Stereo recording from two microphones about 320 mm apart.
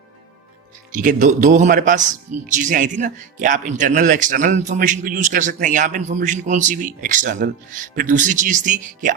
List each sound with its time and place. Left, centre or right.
0.9 s speech: right